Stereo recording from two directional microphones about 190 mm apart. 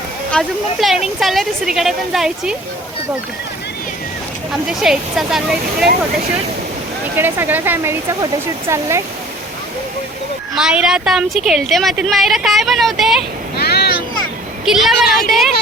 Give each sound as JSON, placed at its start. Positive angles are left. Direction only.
{"t": 0.3, "sound": "a woman's voice", "side_deg": 0}
{"t": 4.6, "sound": "a woman's voice", "side_deg": -5}
{"t": 7.2, "sound": "speech", "side_deg": -10}
{"t": 10.5, "sound": "a woman's voice", "side_deg": -5}
{"t": 13.6, "sound": "vehicle", "side_deg": 55}
{"t": 14.6, "sound": "a woman's voice", "side_deg": 0}